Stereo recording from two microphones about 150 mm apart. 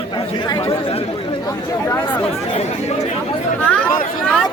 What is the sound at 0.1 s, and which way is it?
Chatter, 30° left (ahead or behind).